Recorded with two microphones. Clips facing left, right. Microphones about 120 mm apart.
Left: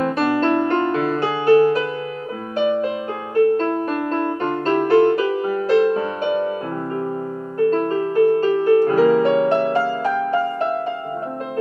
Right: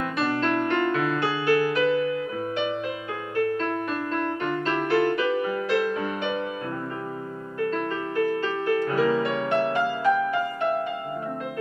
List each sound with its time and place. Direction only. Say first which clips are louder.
0.0 s music: left 7 dB; 35° left (ahead or behind)
7.5 s music: left 9 dB; 35° left (ahead or behind)